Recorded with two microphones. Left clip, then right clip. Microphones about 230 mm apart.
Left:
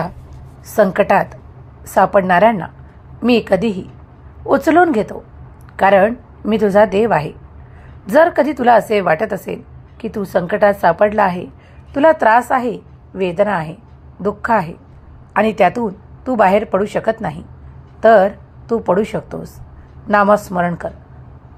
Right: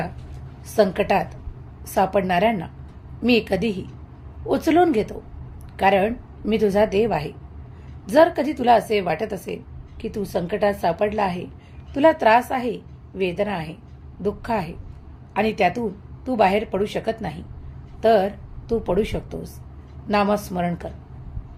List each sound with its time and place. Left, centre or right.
0.8 s a woman's voice: left